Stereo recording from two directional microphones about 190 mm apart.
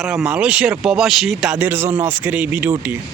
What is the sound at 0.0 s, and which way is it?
Speech, 5° right (ahead or behind).